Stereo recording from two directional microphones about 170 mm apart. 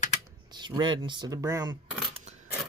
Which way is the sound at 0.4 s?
25° right (ahead or behind).